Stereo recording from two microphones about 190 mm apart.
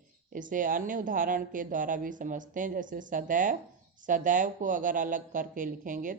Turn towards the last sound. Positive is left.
turn(degrees=-45)  # may be behind; listen again after turning